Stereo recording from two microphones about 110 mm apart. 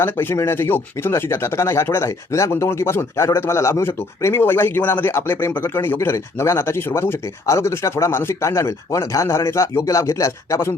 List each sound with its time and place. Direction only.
0.0 s speech: 20° left (ahead or behind)